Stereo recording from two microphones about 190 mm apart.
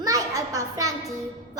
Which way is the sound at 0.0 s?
20° right (ahead or behind).